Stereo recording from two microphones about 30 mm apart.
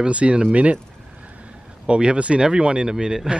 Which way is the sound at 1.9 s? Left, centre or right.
Right.